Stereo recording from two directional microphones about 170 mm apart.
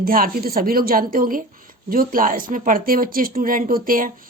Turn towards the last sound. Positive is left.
turn(degrees=-55)  # may be behind; listen again after turning